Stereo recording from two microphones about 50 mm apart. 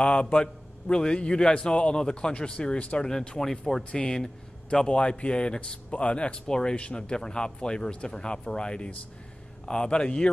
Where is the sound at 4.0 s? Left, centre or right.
Centre.